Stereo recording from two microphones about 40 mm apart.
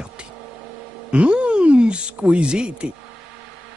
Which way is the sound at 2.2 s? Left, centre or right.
Right.